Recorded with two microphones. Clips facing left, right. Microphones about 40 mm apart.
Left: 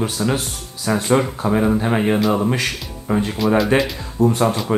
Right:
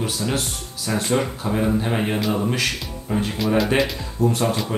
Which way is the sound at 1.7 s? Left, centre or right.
Centre.